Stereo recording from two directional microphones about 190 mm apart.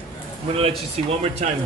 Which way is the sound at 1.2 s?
35° right (ahead or behind).